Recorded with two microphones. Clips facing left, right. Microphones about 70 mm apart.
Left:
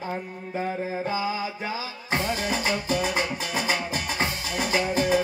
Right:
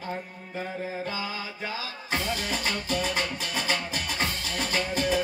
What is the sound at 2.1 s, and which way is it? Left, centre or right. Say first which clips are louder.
Music: left 3 dB; left.